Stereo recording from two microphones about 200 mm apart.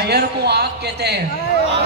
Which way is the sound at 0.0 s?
55° right (ahead or behind).